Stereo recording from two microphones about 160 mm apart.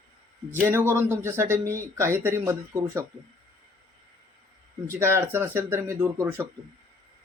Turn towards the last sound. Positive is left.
turn(degrees=-20)  # may be behind; listen again after turning